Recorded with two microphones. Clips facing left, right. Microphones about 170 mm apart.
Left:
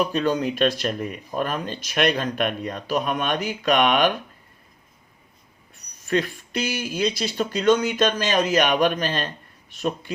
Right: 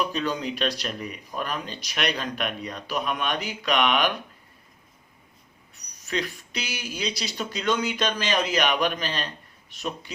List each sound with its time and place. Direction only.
0.1 s speech: 50° left (ahead or behind)
6.1 s speech: 50° left (ahead or behind)